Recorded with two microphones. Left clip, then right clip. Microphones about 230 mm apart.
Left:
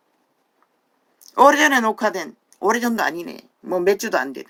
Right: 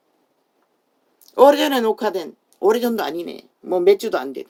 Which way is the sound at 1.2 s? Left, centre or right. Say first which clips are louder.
Even; left.